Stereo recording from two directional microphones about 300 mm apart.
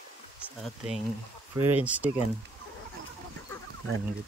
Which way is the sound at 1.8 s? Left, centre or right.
Centre.